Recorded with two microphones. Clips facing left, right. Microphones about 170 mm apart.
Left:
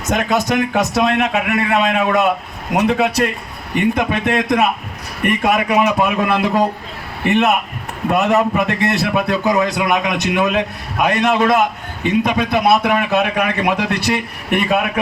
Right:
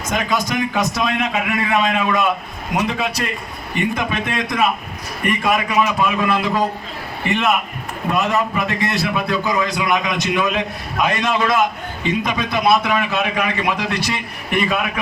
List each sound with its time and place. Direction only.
0.1 s a man's voice: 65° left (ahead or behind)